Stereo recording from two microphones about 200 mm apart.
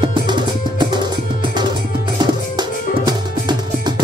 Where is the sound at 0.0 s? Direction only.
25° right (ahead or behind).